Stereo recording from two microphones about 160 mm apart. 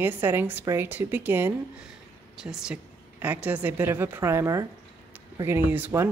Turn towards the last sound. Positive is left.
turn(degrees=-10)  # may be behind; listen again after turning